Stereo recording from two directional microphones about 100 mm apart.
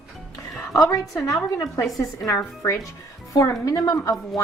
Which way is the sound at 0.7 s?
35° left (ahead or behind).